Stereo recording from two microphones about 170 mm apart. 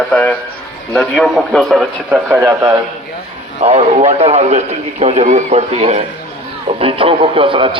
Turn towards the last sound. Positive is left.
turn(degrees=-30)  # may be behind; listen again after turning